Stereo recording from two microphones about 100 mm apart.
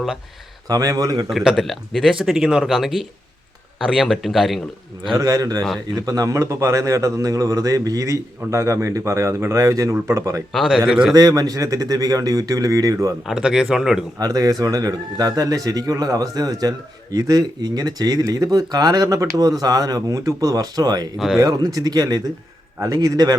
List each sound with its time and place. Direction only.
0.7 s a man's voice: 40° right (ahead or behind)
1.3 s speech: 5° right (ahead or behind)
5.1 s a man's voice: 35° right (ahead or behind)
10.5 s speech: 5° right (ahead or behind)
11.1 s a man's voice: 35° right (ahead or behind)
13.2 s speech: 5° right (ahead or behind)
14.2 s a man's voice: 35° right (ahead or behind)
21.2 s speech: centre (ahead or behind)
21.4 s a man's voice: 35° right (ahead or behind)